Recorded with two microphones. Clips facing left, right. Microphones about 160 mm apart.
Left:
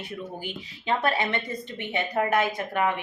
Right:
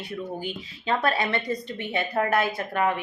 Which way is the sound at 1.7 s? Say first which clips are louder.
Right 1 dB; 20° left (ahead or behind).